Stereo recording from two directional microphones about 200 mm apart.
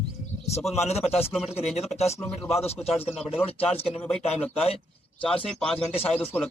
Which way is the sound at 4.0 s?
5° left (ahead or behind).